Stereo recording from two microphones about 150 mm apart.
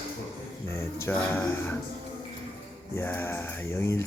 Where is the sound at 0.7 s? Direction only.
15° left (ahead or behind).